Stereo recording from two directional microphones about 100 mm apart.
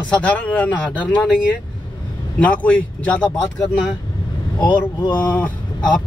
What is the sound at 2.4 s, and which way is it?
Speech, 15° left (ahead or behind).